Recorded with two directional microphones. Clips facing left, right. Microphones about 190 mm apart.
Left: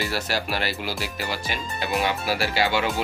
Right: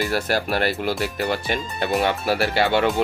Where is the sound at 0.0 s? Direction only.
50° right (ahead or behind).